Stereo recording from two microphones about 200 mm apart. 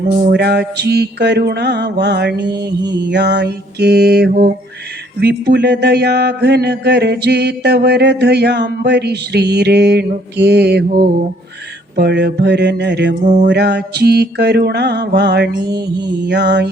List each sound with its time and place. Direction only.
0.3 s speech: 55° right (ahead or behind)
11.9 s speech: 55° right (ahead or behind)
13.2 s music: 35° right (ahead or behind)
13.5 s speech: 55° right (ahead or behind)